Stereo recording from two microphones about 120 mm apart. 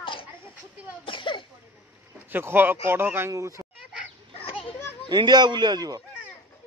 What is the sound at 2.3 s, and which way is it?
A man's voice, 15° right (ahead or behind).